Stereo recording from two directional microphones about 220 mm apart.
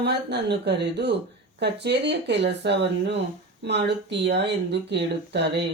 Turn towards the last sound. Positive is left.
turn(degrees=-50)  # may be behind; listen again after turning